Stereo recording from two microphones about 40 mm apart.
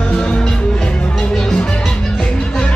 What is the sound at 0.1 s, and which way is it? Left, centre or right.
Music, left.